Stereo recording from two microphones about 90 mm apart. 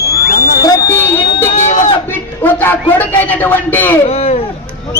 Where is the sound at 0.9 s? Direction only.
25° left (ahead or behind).